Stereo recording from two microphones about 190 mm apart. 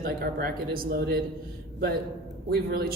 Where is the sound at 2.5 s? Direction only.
55° right (ahead or behind).